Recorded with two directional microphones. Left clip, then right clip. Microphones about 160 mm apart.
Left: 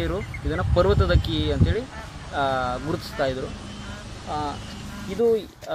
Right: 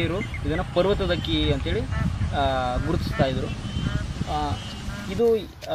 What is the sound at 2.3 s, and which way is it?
Speech, 20° left (ahead or behind).